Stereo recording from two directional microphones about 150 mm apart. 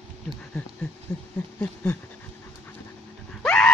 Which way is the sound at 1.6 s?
10° left (ahead or behind).